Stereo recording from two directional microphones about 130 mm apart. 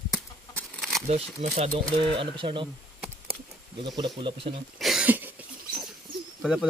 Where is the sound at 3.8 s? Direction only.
40° right (ahead or behind).